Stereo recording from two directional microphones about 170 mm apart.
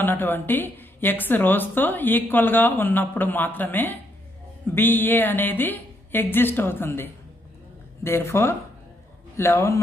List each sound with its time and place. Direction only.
0.0 s a woman's voice: 10° left (ahead or behind)